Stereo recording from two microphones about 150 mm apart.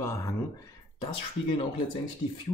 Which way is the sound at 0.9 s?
35° left (ahead or behind).